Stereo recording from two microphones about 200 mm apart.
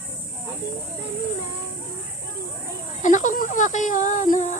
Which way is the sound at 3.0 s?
40° left (ahead or behind).